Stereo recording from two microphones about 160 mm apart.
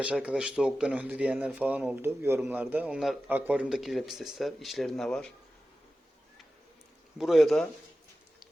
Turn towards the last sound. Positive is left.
turn(degrees=0)  # may be behind; listen again after turning